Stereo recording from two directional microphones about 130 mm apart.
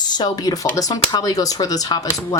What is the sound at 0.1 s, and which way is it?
Speech, 30° left (ahead or behind).